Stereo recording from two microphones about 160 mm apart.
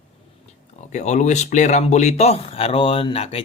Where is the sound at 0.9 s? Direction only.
50° left (ahead or behind).